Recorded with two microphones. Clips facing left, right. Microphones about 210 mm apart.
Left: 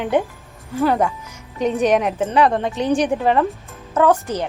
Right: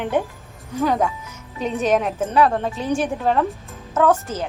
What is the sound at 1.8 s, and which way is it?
Speech, 15° left (ahead or behind).